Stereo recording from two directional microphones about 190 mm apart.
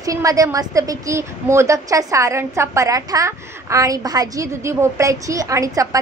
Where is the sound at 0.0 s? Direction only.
20° right (ahead or behind).